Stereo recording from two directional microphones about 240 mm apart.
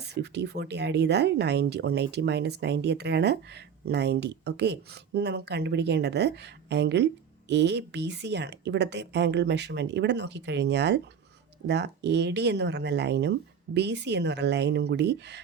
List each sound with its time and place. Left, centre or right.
0.0 s speech: right